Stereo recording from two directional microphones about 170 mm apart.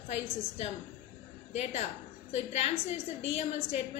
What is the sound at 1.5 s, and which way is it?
A woman's voice, 40° left (ahead or behind).